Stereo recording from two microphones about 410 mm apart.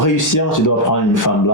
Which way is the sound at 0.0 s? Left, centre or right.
Left.